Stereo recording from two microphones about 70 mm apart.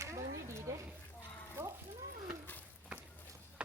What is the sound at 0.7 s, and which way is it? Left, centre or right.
Speech, right.